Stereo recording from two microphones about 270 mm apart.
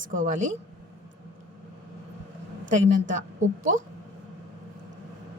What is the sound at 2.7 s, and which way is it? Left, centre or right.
Speech, right.